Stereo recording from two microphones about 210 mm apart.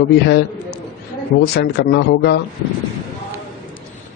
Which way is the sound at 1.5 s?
50° left (ahead or behind).